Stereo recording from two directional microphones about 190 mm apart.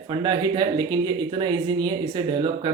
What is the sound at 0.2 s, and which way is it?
Speech, 20° right (ahead or behind).